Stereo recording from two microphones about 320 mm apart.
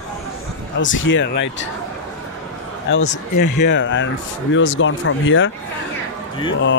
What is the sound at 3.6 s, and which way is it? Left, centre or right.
Speech, left.